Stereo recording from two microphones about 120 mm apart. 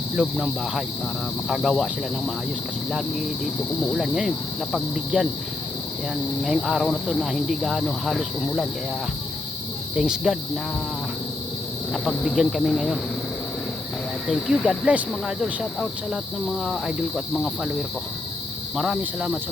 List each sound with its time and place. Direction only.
0.2 s speech: centre (ahead or behind)
6.4 s speech: centre (ahead or behind)
9.9 s speech: 5° right (ahead or behind)
12.0 s speech: centre (ahead or behind)
14.3 s speech: 5° right (ahead or behind)
18.8 s cricket: 5° right (ahead or behind)